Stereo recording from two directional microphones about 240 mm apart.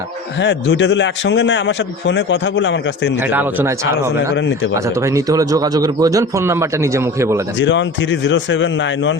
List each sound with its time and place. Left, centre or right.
0.3 s a man's voice: left
3.2 s a man's voice: centre
4.4 s a man's voice: left
4.7 s a man's voice: centre
7.6 s a man's voice: left